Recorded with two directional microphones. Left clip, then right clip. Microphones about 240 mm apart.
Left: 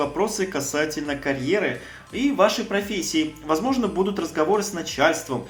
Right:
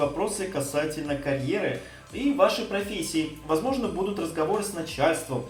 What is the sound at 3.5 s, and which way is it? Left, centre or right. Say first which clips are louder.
Speech: left 3 dB; left.